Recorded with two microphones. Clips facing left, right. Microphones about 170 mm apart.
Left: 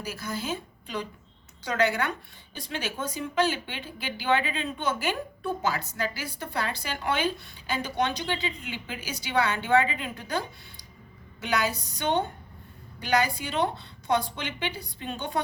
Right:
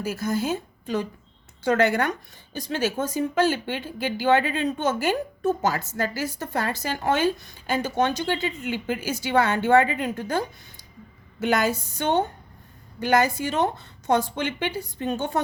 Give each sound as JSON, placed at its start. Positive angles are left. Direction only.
{"t": 0.0, "sound": "a woman's voice", "side_deg": -50}
{"t": 11.7, "sound": "a woman's voice", "side_deg": 15}
{"t": 11.9, "sound": "a woman's voice", "side_deg": -45}